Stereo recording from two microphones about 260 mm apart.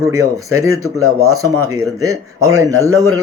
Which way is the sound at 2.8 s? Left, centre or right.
Centre.